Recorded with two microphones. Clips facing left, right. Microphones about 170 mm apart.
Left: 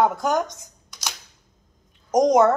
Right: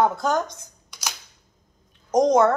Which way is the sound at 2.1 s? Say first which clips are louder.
Left 1 dB; 15° left (ahead or behind).